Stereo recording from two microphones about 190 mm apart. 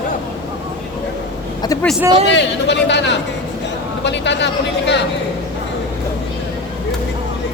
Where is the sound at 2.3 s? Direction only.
70° left (ahead or behind).